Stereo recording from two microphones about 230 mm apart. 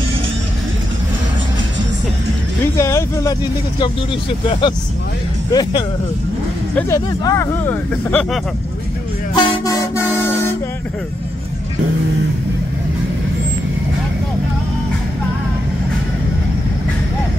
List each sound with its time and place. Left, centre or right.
2.8 s speech: centre
4.5 s speech: left
9.3 s vehicle: centre